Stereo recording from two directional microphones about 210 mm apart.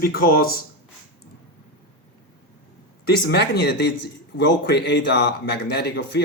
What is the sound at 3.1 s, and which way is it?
Speech, 50° left (ahead or behind).